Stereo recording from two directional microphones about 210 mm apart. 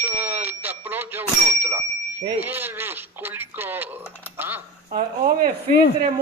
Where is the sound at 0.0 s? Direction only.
10° right (ahead or behind).